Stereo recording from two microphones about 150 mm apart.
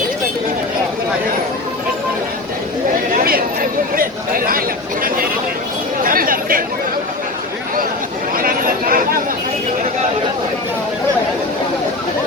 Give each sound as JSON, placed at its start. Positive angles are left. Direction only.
{"t": 3.2, "sound": "chatter", "side_deg": -75}
{"t": 6.0, "sound": "chatter", "side_deg": -70}
{"t": 8.4, "sound": "a sound", "side_deg": -70}